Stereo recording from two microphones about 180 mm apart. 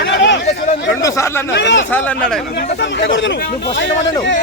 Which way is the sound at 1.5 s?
75° left (ahead or behind).